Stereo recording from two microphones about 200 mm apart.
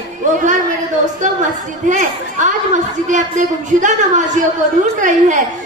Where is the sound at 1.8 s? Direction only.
40° right (ahead or behind).